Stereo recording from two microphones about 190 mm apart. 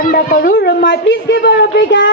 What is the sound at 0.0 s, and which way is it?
Speech, 45° left (ahead or behind).